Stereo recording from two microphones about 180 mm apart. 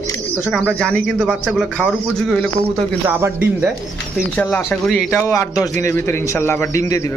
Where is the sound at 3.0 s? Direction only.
10° right (ahead or behind).